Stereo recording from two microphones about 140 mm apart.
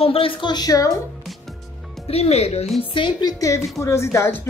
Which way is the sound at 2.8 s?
35° left (ahead or behind).